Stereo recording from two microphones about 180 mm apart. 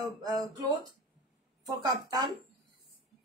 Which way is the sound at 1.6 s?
20° right (ahead or behind).